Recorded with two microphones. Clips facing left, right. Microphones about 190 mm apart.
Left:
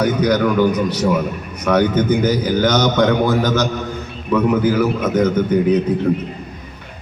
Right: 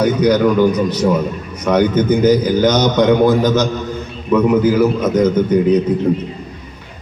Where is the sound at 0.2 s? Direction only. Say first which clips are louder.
Right 3 dB; 15° right (ahead or behind).